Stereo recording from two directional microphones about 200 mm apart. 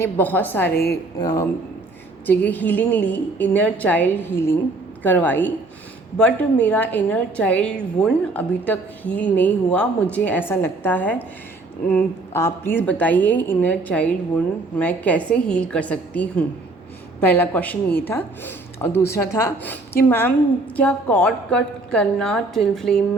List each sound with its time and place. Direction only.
0.0 s a woman's voice: 10° left (ahead or behind)